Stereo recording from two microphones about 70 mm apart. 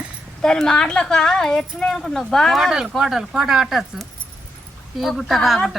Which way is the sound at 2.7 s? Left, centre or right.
Centre.